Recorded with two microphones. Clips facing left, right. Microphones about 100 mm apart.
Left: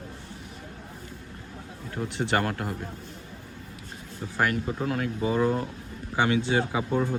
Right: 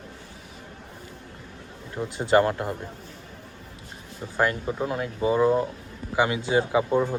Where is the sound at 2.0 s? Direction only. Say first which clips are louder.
Right 6 dB; 20° right (ahead or behind).